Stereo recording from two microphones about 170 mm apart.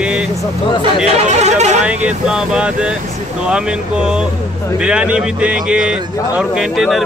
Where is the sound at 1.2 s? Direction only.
40° right (ahead or behind).